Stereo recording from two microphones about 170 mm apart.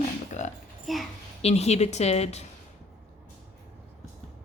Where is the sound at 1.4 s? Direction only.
40° left (ahead or behind).